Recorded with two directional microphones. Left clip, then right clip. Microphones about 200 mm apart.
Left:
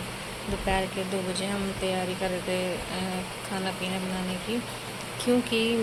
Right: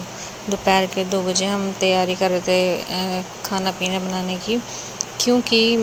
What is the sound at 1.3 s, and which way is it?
Speech, 25° right (ahead or behind).